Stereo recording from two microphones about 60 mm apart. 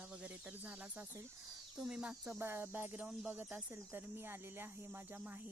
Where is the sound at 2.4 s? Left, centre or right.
Right.